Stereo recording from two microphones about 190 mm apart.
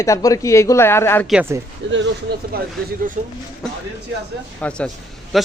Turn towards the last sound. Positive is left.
turn(degrees=0)  # may be behind; listen again after turning